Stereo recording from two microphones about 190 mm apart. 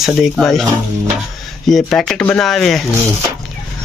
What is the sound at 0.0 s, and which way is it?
Speech, centre (ahead or behind).